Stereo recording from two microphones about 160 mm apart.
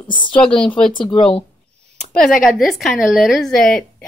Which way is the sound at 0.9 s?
30° left (ahead or behind).